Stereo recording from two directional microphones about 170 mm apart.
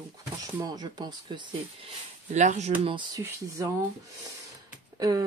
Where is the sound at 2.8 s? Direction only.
30° right (ahead or behind).